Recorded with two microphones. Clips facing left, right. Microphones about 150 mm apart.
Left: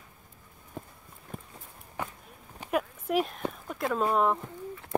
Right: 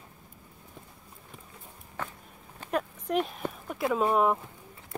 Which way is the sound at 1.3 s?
45° left (ahead or behind).